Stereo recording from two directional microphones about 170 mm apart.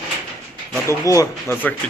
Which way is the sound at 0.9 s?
15° left (ahead or behind).